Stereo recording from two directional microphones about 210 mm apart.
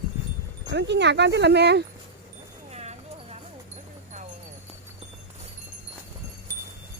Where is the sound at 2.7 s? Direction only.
30° right (ahead or behind).